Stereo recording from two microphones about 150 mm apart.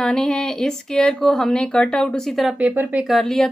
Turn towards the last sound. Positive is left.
turn(degrees=5)  # may be behind; listen again after turning